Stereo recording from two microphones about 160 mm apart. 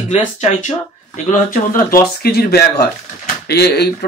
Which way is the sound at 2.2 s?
80° left.